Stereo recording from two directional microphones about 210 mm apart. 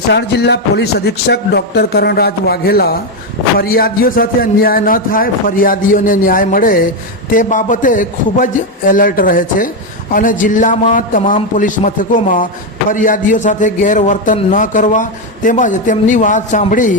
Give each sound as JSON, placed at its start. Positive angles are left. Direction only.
{"t": 0.1, "sound": "a man's voice", "side_deg": 55}